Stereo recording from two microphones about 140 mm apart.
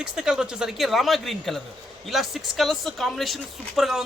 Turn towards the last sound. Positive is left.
turn(degrees=0)  # may be behind; listen again after turning